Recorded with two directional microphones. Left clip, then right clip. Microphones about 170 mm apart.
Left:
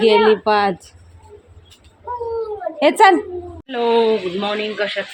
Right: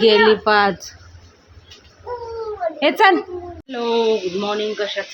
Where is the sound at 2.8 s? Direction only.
20° left (ahead or behind).